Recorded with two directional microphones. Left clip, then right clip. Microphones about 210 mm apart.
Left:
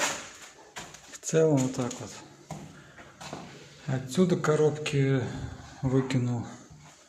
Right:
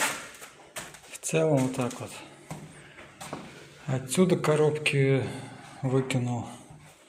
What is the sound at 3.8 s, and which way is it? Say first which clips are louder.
Speech: right 2 dB; 5° left (ahead or behind).